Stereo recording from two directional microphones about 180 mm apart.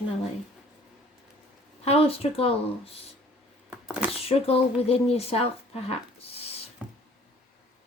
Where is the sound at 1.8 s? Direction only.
35° left (ahead or behind).